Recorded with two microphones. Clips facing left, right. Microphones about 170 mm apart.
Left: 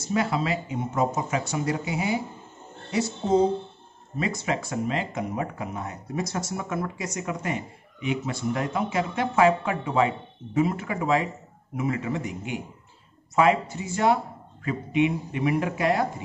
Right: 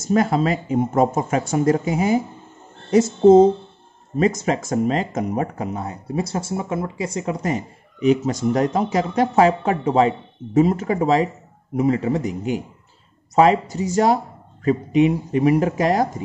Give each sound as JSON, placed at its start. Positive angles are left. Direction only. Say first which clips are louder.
{"t": 0.0, "sound": "speech", "louder": "right 7 dB", "side_deg": -45}
{"t": 5.7, "sound": "speech", "louder": "right 6 dB", "side_deg": -30}